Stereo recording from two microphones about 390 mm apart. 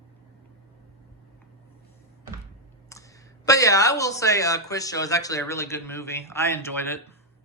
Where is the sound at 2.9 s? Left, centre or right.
Centre.